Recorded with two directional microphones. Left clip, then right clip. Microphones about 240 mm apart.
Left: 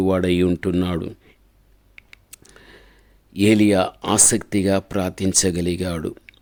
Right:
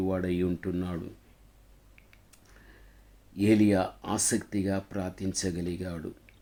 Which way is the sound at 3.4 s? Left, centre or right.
Left.